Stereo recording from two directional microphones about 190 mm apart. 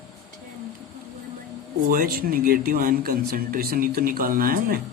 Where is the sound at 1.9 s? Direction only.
50° right (ahead or behind).